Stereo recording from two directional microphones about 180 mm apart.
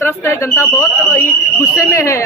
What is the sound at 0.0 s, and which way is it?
A man's voice, 15° left (ahead or behind).